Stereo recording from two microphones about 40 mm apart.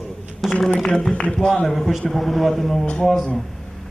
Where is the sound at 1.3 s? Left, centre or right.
Centre.